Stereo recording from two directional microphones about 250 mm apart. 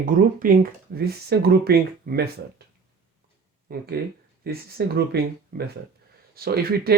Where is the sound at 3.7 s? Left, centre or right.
Right.